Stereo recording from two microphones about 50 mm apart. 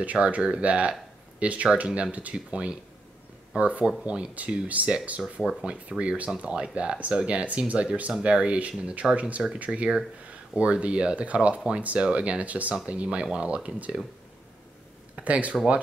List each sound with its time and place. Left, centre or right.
0.0 s speech: right
5.2 s speech: centre
5.6 s speech: right
15.1 s speech: right